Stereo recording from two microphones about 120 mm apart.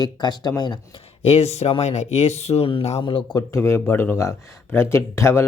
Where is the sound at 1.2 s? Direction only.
60° left (ahead or behind).